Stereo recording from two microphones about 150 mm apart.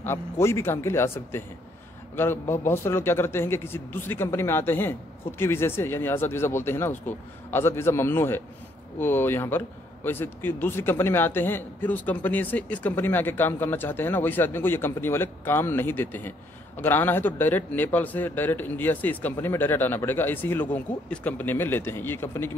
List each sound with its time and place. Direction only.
0.0 s a man's voice: 15° left (ahead or behind)